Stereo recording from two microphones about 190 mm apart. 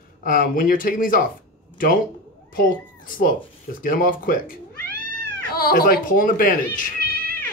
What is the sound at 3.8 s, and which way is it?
Speech, 45° left (ahead or behind).